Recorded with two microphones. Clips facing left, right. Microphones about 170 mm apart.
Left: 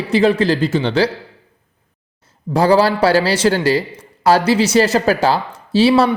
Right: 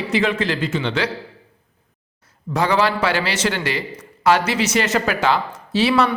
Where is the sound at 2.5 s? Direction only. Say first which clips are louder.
Left 6 dB; 35° left (ahead or behind).